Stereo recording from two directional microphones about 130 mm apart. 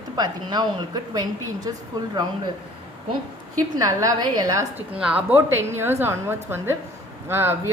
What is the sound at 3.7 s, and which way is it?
Speech, 25° right (ahead or behind).